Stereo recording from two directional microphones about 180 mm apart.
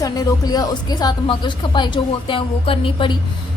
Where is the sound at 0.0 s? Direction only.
20° left (ahead or behind).